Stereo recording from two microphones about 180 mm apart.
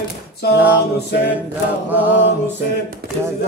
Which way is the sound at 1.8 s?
10° right (ahead or behind).